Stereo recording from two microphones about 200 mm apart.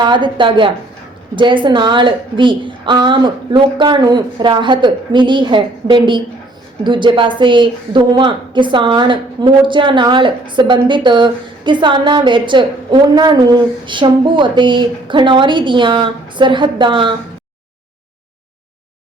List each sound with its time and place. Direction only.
0.0 s a woman's voice: 25° right (ahead or behind)